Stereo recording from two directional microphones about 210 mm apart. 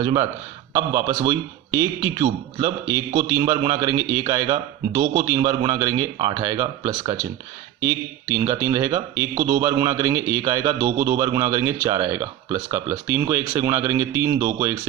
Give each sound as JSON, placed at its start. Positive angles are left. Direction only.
{"t": 0.0, "sound": "speech", "side_deg": -20}